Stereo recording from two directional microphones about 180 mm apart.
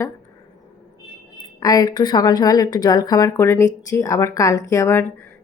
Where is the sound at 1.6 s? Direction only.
20° left (ahead or behind).